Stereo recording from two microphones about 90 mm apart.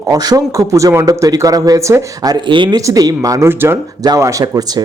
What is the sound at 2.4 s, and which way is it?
Speech, 65° right (ahead or behind).